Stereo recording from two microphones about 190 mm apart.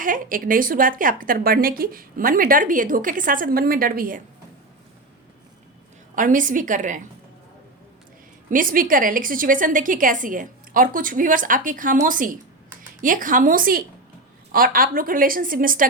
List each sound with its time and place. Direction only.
0.0 s speech: 45° right (ahead or behind)
6.1 s speech: 45° right (ahead or behind)
8.4 s speech: 45° right (ahead or behind)